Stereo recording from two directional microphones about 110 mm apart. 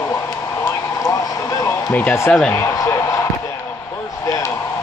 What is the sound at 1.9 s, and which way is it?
Speech, 15° left (ahead or behind).